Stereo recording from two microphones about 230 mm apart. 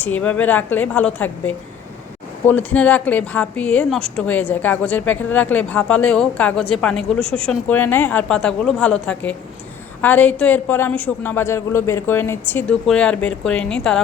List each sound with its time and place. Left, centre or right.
0.0 s a woman's voice: centre
7.2 s speech: right
7.4 s a woman's voice: centre